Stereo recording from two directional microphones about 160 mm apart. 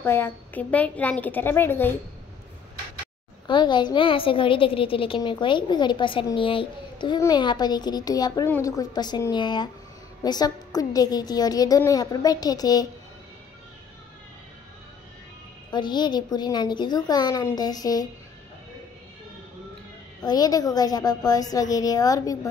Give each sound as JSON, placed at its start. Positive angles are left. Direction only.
{"t": 0.0, "sound": "a woman's voice", "side_deg": 15}
{"t": 3.4, "sound": "a woman's voice", "side_deg": 30}
{"t": 15.7, "sound": "a woman's voice", "side_deg": 25}
{"t": 20.2, "sound": "a woman's voice", "side_deg": 25}